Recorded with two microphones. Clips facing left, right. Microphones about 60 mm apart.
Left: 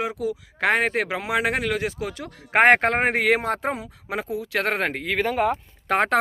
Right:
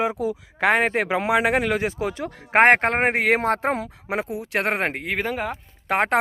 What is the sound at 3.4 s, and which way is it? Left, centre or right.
Speech, right.